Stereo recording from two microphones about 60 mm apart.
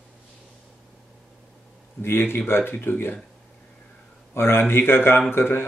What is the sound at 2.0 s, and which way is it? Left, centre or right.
Speech, left.